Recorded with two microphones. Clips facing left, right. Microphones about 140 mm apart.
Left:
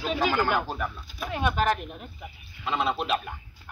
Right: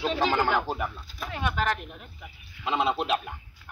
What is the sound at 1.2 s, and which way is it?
Speech, 20° left (ahead or behind).